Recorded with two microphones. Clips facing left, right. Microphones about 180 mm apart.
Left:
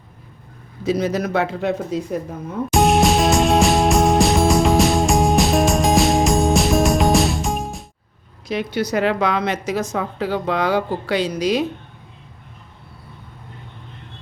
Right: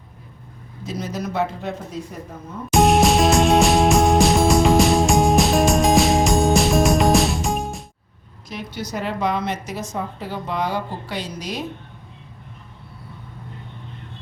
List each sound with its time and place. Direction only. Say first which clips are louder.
0.9 s speech: left 8 dB; 75° left (ahead or behind)
2.7 s music: even; centre (ahead or behind)
8.4 s speech: left 9 dB; 75° left (ahead or behind); by 11.6 s 90° left